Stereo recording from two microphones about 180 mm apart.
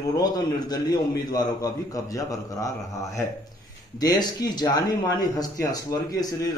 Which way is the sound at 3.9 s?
20° left (ahead or behind).